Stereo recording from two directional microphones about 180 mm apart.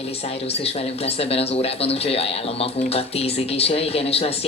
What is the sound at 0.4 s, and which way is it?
Speech, 35° left (ahead or behind).